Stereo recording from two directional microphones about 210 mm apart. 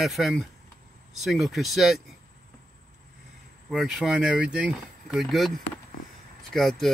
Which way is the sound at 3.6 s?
Centre (ahead or behind).